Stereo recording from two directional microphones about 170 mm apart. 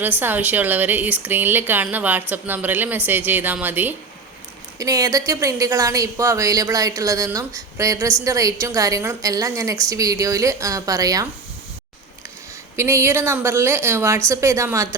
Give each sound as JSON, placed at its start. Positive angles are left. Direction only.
{"t": 0.0, "sound": "a woman's voice", "side_deg": -10}
{"t": 12.7, "sound": "speech", "side_deg": -15}